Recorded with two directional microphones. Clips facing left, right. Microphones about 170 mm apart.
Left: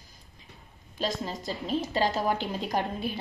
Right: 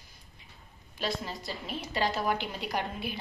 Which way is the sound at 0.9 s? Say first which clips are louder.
Left 3 dB; 40° left (ahead or behind).